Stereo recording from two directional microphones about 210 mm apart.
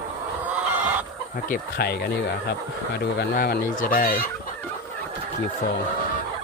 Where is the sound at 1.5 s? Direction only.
50° left (ahead or behind).